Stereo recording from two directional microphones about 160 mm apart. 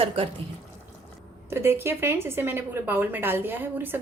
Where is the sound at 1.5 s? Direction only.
15° right (ahead or behind).